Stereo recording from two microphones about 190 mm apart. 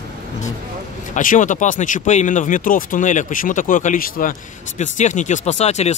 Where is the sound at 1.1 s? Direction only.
45° left (ahead or behind).